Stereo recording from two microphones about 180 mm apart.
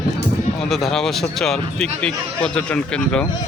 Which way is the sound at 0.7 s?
Centre (ahead or behind).